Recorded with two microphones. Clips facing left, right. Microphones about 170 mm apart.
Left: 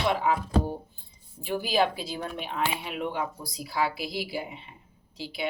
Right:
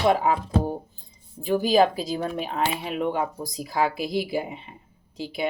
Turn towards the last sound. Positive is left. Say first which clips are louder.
# right 5 dB
turn(degrees=-45)  # may be behind; listen again after turning